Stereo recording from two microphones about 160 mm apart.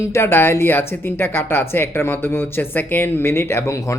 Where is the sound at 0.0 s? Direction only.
15° left (ahead or behind).